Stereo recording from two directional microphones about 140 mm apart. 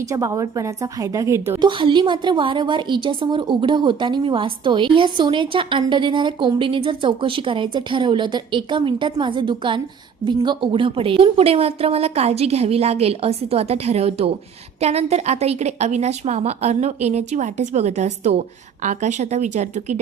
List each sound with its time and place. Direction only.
0.1 s a woman's voice: 25° right (ahead or behind)
1.6 s a woman's voice: 35° right (ahead or behind); by 20.0 s 60° right (ahead or behind)